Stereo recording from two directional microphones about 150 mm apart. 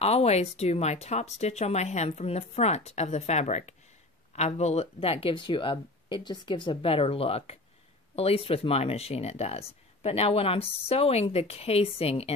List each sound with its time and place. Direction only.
0.0 s speech: 45° left (ahead or behind)